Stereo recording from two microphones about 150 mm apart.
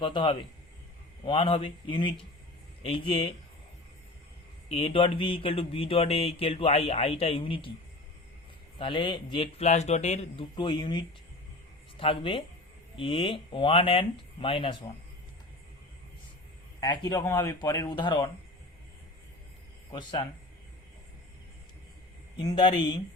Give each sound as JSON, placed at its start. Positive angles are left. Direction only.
{"t": 0.0, "sound": "speech", "side_deg": 35}
{"t": 4.7, "sound": "speech", "side_deg": 40}
{"t": 8.8, "sound": "speech", "side_deg": 35}
{"t": 10.5, "sound": "speech", "side_deg": 30}
{"t": 16.8, "sound": "speech", "side_deg": 25}
{"t": 19.9, "sound": "speech", "side_deg": 30}
{"t": 22.4, "sound": "speech", "side_deg": 30}